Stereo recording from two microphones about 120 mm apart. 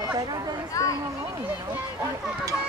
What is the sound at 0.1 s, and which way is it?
Chatter, 35° right (ahead or behind).